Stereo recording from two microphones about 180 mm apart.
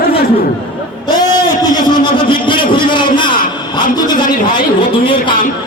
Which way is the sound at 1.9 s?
25° left (ahead or behind).